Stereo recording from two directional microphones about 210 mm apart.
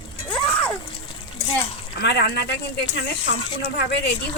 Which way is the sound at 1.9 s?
50° left (ahead or behind).